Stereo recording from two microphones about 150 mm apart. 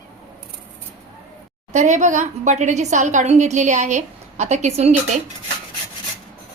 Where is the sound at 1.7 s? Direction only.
55° right (ahead or behind).